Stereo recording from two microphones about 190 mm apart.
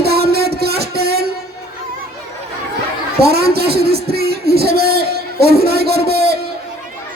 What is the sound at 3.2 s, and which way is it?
Speech, 55° right (ahead or behind).